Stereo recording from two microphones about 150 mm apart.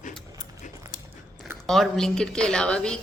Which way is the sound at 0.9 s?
60° left (ahead or behind).